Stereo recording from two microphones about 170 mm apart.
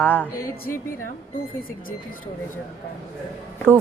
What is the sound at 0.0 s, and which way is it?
Music, 10° left (ahead or behind).